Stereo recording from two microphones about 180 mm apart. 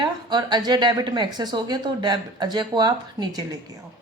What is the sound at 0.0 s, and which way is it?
A woman's voice, 25° right (ahead or behind).